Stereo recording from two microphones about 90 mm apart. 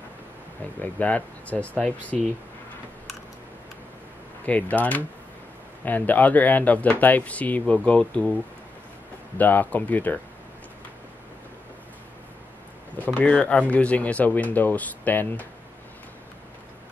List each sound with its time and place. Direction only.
0.7 s speech: 20° left (ahead or behind)
4.5 s speech: 15° left (ahead or behind)
9.4 s speech: 20° left (ahead or behind)
12.9 s speech: 15° left (ahead or behind)